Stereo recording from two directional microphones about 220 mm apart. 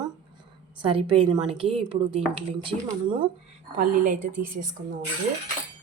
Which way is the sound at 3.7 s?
35° right (ahead or behind).